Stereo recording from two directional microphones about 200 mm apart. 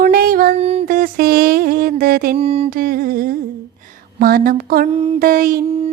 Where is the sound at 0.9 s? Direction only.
45° right (ahead or behind).